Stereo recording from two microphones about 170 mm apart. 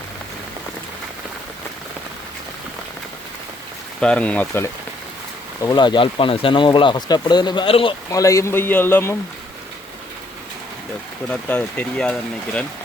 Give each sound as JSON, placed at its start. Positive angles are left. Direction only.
{"t": 4.0, "sound": "a man's voice", "side_deg": 5}
{"t": 5.6, "sound": "speech", "side_deg": 25}
{"t": 8.1, "sound": "a man's voice", "side_deg": 20}
{"t": 11.3, "sound": "a man's voice", "side_deg": 10}